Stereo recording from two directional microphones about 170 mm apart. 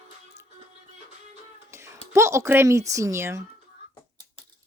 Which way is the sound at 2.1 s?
15° right (ahead or behind).